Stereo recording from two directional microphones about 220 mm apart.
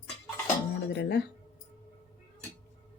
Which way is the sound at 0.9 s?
50° left (ahead or behind).